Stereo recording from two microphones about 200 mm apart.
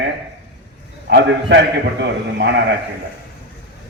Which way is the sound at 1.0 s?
60° right (ahead or behind).